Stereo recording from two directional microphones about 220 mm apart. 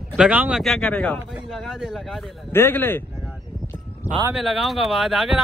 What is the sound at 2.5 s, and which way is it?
Speech, 10° left (ahead or behind).